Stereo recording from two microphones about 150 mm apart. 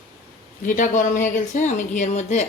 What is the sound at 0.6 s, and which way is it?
Speech, 60° left (ahead or behind).